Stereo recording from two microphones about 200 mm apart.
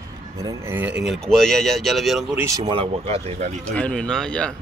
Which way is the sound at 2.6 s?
30° right (ahead or behind).